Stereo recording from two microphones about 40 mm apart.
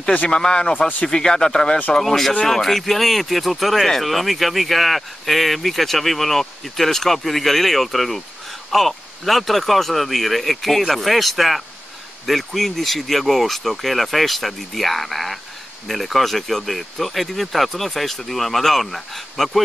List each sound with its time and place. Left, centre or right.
0.3 s a man's voice: centre
0.7 s a man's voice: left
1.0 s speech: centre